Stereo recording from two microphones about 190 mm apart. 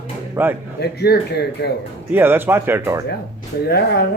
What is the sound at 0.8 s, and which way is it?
Speech, 60° left (ahead or behind).